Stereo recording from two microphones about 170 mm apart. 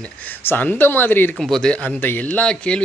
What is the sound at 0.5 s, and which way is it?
Speech, 10° left (ahead or behind).